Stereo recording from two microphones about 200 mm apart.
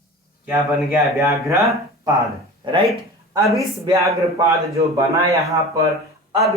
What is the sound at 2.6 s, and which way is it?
Speech, 30° right (ahead or behind).